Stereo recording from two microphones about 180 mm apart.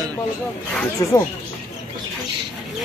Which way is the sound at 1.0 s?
15° left (ahead or behind).